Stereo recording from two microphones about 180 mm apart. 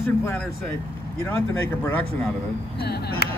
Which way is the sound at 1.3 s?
15° left (ahead or behind).